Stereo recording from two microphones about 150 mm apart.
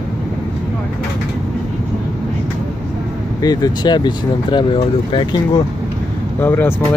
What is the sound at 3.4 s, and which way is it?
Speech, 25° left (ahead or behind).